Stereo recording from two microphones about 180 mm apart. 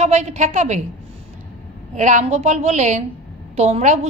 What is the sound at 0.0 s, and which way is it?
Speech, 40° right (ahead or behind).